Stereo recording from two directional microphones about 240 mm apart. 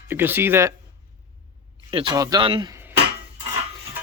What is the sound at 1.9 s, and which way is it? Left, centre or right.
A man's voice, centre.